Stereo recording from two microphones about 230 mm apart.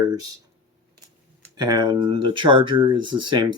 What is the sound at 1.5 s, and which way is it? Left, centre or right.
Speech, centre.